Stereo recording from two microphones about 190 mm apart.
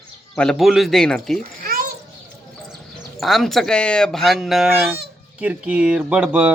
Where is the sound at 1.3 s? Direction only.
50° right (ahead or behind).